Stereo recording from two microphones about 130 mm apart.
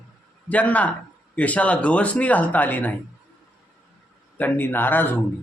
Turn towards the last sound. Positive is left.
turn(degrees=15)  # may be behind; listen again after turning